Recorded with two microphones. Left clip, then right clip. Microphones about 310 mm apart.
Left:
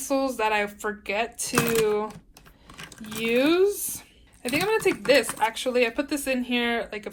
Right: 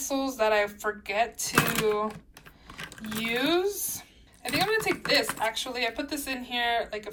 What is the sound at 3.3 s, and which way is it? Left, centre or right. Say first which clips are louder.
Speech: left 6 dB; centre.